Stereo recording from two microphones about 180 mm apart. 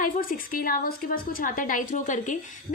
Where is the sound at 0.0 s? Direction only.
50° left (ahead or behind).